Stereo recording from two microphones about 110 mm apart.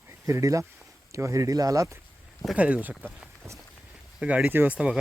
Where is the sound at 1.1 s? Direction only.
30° right (ahead or behind).